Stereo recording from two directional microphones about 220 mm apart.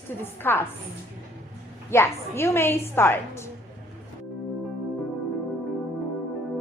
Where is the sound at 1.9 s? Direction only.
10° left (ahead or behind).